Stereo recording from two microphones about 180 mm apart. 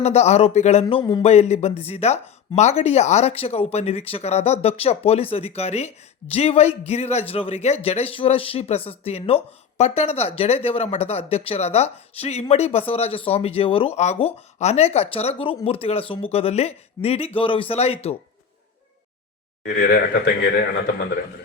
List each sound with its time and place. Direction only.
0.0 s speech: 35° left (ahead or behind)
19.6 s speech: 55° left (ahead or behind)